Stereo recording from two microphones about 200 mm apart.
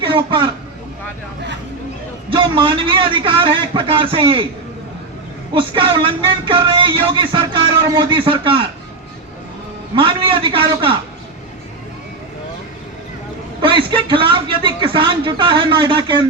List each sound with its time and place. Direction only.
0.1 s a man's voice: 25° right (ahead or behind)
2.3 s music: 25° right (ahead or behind)
5.5 s music: 25° right (ahead or behind)
9.9 s music: 25° right (ahead or behind)
13.6 s music: 25° right (ahead or behind)